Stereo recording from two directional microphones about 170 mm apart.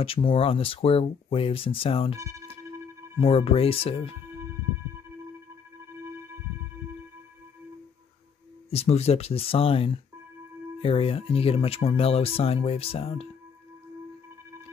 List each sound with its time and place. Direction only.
0.0 s speech: 35° left (ahead or behind)
3.2 s speech: 35° left (ahead or behind)
8.6 s speech: 40° left (ahead or behind)